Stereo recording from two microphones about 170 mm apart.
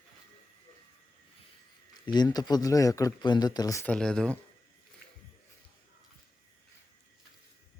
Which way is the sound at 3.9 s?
5° left (ahead or behind).